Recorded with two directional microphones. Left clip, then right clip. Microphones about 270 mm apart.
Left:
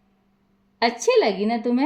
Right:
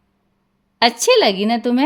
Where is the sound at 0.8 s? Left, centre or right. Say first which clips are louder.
Right 5 dB; right.